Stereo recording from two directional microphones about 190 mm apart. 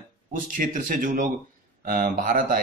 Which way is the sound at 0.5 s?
45° right (ahead or behind).